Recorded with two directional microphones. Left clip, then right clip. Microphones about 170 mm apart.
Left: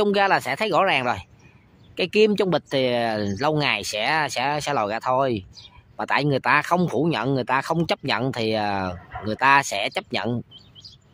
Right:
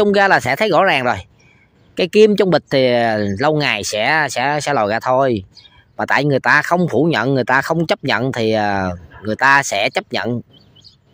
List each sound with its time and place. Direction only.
0.0 s speech: 30° right (ahead or behind)